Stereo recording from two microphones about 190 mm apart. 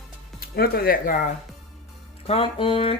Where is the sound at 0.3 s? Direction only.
55° left (ahead or behind).